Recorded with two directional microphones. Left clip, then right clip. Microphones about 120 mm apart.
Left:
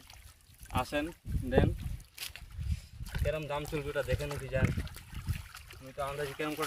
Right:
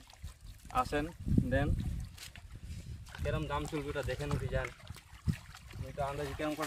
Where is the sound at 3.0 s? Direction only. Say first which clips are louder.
Left 3 dB; 30° left (ahead or behind).